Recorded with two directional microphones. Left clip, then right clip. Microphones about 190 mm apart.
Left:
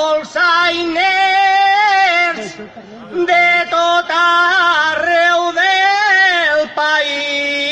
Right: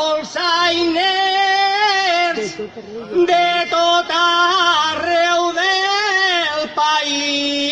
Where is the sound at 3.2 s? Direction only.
35° left (ahead or behind).